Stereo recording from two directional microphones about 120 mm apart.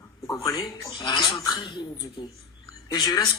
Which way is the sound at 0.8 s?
35° left (ahead or behind).